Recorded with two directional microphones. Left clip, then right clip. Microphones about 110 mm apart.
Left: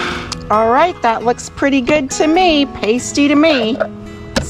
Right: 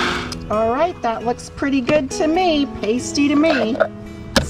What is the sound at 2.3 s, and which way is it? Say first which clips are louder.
Music: left 8 dB; 20° right (ahead or behind).